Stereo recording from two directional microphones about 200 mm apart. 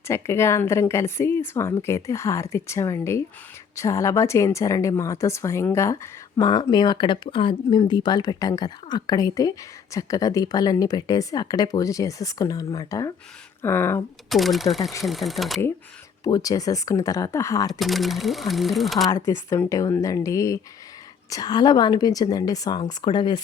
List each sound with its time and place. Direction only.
0.1 s a woman's voice: 15° left (ahead or behind)
14.3 s speech: centre (ahead or behind)
16.2 s a woman's voice: 15° left (ahead or behind)
17.7 s speech: centre (ahead or behind)
19.0 s a woman's voice: 15° left (ahead or behind)